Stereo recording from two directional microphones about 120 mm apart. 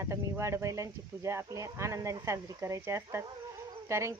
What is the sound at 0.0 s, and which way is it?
Speech, 25° right (ahead or behind).